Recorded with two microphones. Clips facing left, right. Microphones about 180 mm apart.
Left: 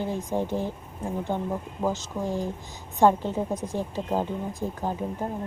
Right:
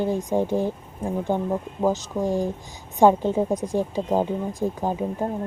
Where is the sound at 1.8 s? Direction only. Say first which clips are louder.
Right 5 dB; 15° right (ahead or behind).